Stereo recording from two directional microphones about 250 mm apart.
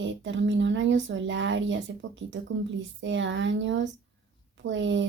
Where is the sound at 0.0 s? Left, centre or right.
Right.